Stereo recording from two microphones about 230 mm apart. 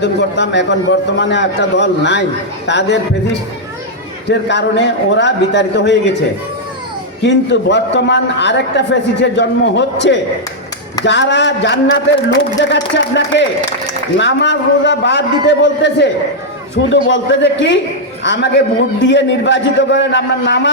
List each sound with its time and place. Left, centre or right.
0.0 s a man's voice: left
4.3 s a man's voice: left
7.2 s a man's voice: left